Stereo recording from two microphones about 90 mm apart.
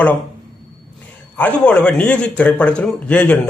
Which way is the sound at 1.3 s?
15° left (ahead or behind).